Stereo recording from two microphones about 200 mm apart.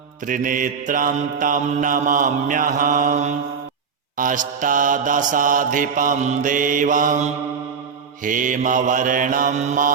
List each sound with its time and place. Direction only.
0.3 s mantra: 40° right (ahead or behind)